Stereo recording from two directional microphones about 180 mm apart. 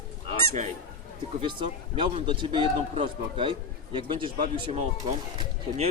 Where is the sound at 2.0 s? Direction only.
30° right (ahead or behind).